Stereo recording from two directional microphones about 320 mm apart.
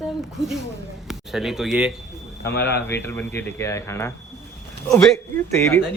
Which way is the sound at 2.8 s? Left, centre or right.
Centre.